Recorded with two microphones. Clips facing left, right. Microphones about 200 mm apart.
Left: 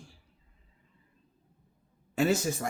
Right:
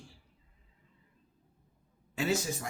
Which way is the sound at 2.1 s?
50° left (ahead or behind).